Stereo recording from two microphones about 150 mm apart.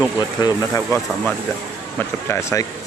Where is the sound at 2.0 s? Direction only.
20° left (ahead or behind).